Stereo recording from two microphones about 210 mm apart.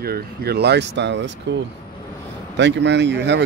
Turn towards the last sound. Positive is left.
turn(degrees=-55)  # may be behind; listen again after turning